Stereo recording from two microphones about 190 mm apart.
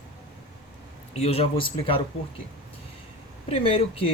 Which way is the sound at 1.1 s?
30° left (ahead or behind).